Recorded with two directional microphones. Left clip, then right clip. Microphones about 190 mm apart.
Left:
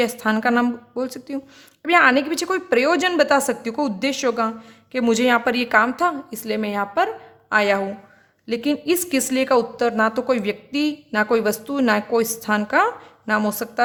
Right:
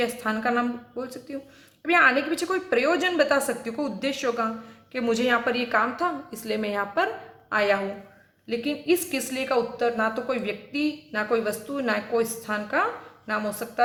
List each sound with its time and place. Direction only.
0.0 s a woman's voice: 45° left (ahead or behind)
8.4 s a woman's voice: 50° left (ahead or behind)